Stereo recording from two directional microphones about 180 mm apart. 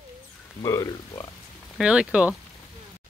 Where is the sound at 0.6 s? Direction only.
20° left (ahead or behind).